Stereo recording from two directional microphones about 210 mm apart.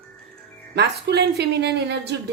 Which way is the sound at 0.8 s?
50° right (ahead or behind).